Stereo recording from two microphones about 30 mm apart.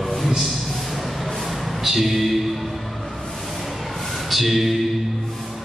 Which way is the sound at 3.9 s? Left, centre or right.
Centre.